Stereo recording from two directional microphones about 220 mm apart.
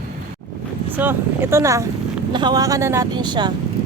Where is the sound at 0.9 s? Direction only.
10° right (ahead or behind).